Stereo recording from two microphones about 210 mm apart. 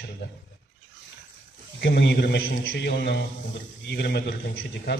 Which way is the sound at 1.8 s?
55° left (ahead or behind).